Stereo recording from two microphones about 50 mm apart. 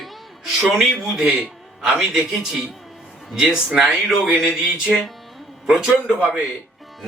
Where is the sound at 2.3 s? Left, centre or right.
Centre.